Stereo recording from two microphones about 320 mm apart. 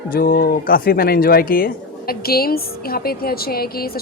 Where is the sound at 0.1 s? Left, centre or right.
Left.